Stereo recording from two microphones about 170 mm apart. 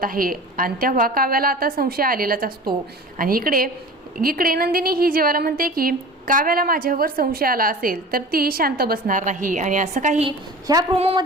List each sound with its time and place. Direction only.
0.0 s a woman's voice: 55° right (ahead or behind)
10.2 s a woman's voice: 25° right (ahead or behind)
10.9 s speech: 35° right (ahead or behind)